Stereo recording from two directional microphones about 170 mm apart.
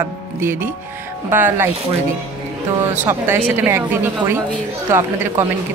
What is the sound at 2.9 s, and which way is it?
Speech, 10° right (ahead or behind).